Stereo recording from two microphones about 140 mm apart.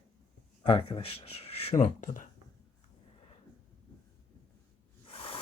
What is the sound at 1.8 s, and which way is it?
Speech, 65° left (ahead or behind).